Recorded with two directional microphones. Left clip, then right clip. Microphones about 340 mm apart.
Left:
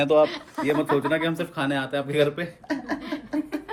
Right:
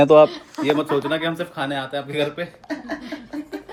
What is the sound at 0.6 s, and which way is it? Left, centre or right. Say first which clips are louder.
Speech: right 3 dB; centre.